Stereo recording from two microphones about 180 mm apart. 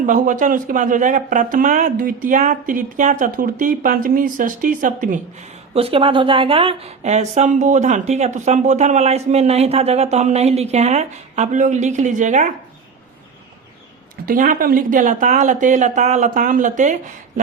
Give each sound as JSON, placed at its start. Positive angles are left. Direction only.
{"t": 0.0, "sound": "speech", "side_deg": -45}
{"t": 14.3, "sound": "speech", "side_deg": -50}